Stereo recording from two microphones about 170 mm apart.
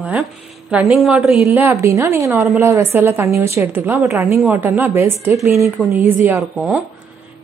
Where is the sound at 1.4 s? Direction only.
15° right (ahead or behind).